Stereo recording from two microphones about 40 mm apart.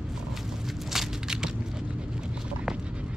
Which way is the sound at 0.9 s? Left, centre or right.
Centre.